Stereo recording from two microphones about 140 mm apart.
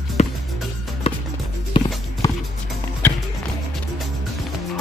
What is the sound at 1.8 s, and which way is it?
Music, 35° left (ahead or behind).